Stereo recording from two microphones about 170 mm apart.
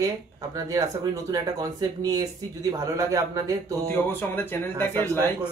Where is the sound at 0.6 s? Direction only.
20° right (ahead or behind).